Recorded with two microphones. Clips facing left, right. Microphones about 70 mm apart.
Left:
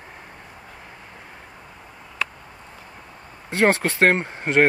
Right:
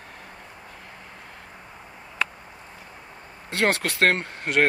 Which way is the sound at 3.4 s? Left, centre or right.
Left.